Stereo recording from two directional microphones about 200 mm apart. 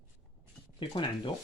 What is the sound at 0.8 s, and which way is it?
Speech, 25° left (ahead or behind).